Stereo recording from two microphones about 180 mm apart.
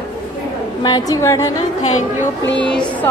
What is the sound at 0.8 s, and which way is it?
Speech, 20° left (ahead or behind).